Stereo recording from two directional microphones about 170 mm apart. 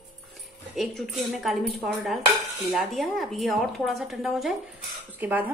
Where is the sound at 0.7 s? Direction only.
Centre (ahead or behind).